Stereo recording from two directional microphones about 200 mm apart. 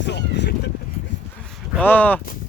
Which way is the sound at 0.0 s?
60° left (ahead or behind).